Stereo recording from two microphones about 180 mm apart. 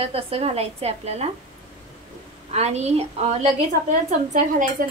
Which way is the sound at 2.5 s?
35° right (ahead or behind).